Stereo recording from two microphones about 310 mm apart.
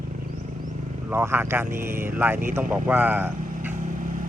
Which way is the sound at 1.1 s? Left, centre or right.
Centre.